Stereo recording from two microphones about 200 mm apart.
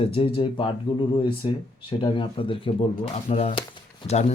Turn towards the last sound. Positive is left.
turn(degrees=35)  # may be behind; listen again after turning